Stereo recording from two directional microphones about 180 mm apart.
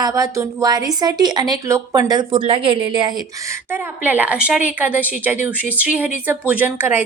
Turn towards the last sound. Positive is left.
turn(degrees=-10)  # may be behind; listen again after turning